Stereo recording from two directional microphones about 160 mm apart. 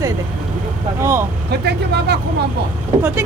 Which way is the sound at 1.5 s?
90° right.